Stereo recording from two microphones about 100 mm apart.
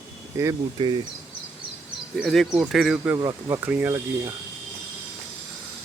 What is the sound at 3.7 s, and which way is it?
Speech, 25° right (ahead or behind).